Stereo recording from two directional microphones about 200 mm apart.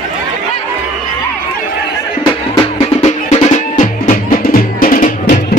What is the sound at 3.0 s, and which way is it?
Music, 35° left (ahead or behind).